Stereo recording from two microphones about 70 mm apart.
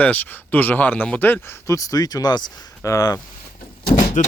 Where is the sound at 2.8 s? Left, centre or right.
Left.